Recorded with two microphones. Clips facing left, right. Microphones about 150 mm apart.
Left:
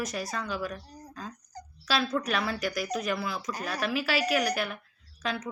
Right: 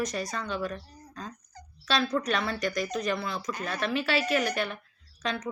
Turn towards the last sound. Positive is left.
turn(degrees=5)  # may be behind; listen again after turning